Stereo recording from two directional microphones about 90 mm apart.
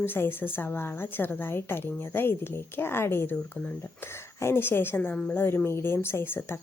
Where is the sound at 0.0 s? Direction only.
25° left (ahead or behind).